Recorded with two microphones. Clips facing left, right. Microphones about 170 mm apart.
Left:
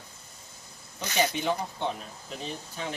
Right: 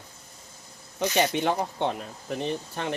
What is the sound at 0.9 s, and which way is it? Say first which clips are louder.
Speech: right 4 dB; 65° right (ahead or behind).